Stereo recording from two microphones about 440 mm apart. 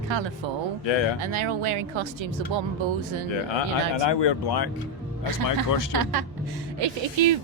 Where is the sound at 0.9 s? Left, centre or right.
Left.